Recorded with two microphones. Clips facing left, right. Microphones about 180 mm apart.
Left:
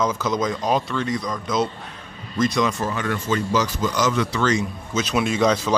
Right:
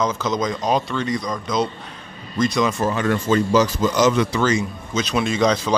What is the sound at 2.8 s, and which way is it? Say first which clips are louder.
Speech: right 5 dB; 35° right (ahead or behind).